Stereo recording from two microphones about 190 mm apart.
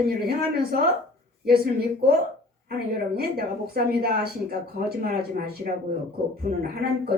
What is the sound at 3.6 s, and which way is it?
A woman's voice, 55° right (ahead or behind).